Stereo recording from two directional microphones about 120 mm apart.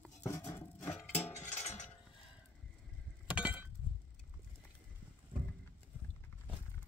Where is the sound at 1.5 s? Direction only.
60° left (ahead or behind).